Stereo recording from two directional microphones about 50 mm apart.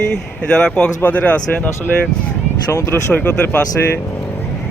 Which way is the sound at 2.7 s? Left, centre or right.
Left.